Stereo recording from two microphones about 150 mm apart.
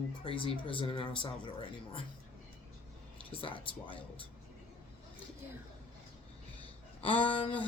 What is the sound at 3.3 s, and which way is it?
Speech, 35° left (ahead or behind).